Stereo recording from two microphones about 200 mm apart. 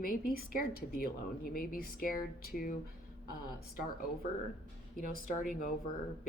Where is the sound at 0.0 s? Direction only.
45° left (ahead or behind).